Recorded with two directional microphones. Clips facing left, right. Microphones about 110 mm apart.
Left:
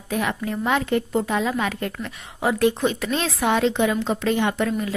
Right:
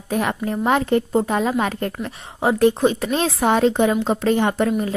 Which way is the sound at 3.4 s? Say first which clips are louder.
Right 3 dB; 45° right (ahead or behind).